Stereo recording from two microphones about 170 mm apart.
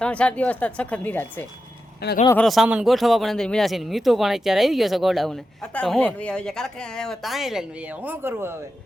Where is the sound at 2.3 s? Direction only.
Centre (ahead or behind).